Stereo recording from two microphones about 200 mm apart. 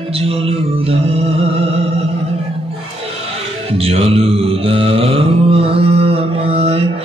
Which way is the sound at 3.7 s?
30° right (ahead or behind).